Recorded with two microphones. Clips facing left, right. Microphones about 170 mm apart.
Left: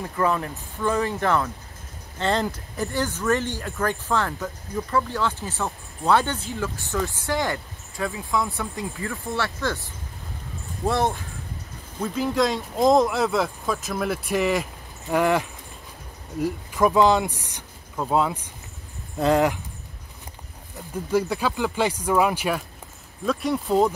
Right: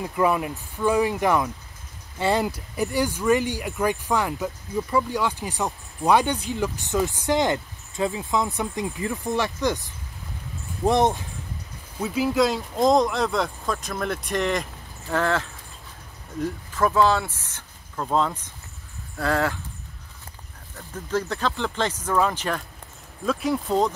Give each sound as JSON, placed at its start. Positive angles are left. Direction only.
{"t": 0.0, "sound": "speech", "side_deg": -15}
{"t": 10.9, "sound": "speech", "side_deg": -20}
{"t": 12.0, "sound": "speech", "side_deg": -5}
{"t": 20.7, "sound": "speech", "side_deg": 10}
{"t": 23.2, "sound": "speech", "side_deg": 0}